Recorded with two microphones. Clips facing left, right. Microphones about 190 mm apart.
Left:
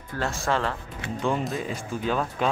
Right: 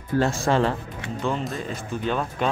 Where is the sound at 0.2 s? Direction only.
25° right (ahead or behind).